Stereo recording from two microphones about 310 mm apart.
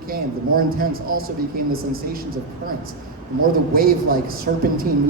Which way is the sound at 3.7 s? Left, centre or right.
Right.